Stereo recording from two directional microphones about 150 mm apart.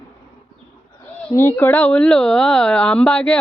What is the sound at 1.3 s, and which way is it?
A woman's voice, 15° left (ahead or behind).